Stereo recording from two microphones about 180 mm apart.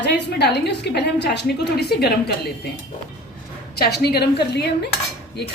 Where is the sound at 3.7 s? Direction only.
60° left (ahead or behind).